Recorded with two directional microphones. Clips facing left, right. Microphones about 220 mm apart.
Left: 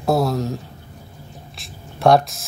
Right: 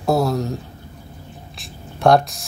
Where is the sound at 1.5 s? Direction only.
Centre (ahead or behind).